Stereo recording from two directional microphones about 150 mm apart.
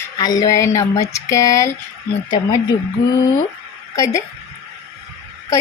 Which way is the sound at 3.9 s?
20° left (ahead or behind).